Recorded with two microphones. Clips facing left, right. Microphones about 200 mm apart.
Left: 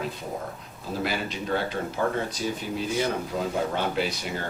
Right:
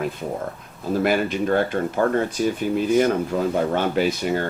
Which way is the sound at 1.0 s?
55° right (ahead or behind).